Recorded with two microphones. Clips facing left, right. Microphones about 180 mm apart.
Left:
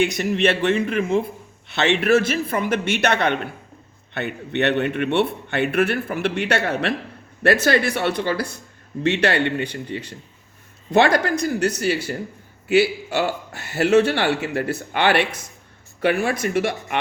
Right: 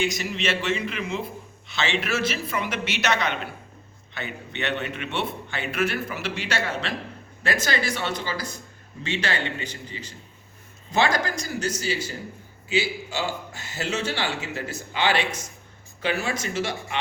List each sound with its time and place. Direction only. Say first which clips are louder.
0.0 s a man's voice: left 7 dB; 60° left (ahead or behind)